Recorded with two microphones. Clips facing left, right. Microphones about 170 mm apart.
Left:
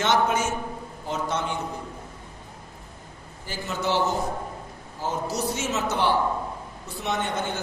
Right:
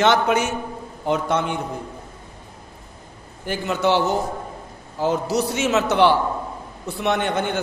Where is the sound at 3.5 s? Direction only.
65° right (ahead or behind).